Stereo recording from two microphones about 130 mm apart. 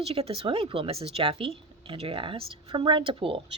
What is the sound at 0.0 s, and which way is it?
Speech, 50° right (ahead or behind).